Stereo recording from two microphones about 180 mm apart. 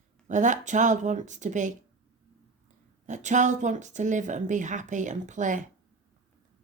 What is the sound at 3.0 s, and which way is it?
Speech, 45° right (ahead or behind).